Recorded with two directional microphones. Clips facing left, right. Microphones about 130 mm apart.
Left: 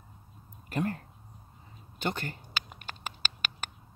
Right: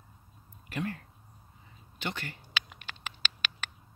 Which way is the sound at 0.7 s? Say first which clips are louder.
Left 4 dB; 45° left (ahead or behind).